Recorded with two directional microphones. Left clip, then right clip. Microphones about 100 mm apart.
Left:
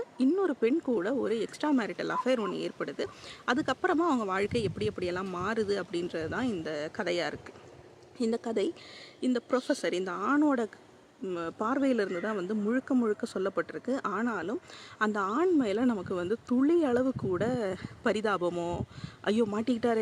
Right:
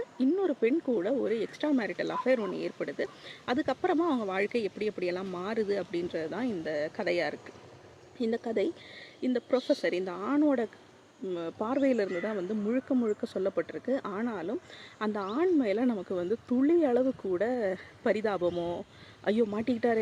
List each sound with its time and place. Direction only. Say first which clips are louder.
0.2 s speech: even; 40° left (ahead or behind)
3.9 s speech: left 1 dB; 40° left (ahead or behind)